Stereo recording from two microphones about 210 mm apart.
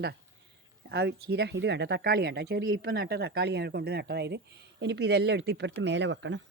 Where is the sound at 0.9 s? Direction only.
50° right (ahead or behind).